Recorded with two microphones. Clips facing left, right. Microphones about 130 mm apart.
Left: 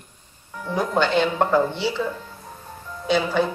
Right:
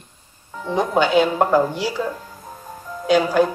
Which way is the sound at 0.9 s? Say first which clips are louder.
Right 4 dB; 10° right (ahead or behind).